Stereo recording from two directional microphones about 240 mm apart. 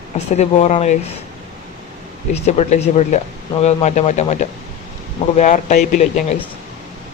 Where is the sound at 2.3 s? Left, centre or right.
Left.